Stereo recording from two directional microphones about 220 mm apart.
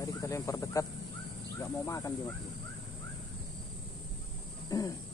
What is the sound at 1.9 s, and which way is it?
Speech, 15° left (ahead or behind).